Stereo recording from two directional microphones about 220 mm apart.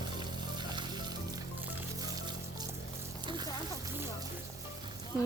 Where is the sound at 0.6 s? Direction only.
20° right (ahead or behind).